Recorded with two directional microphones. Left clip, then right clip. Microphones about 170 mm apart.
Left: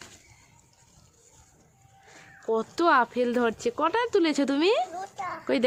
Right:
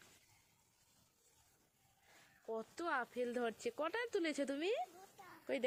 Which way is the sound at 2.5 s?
Centre (ahead or behind).